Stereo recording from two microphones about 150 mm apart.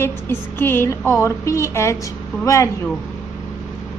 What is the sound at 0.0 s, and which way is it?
A woman's voice, 15° left (ahead or behind).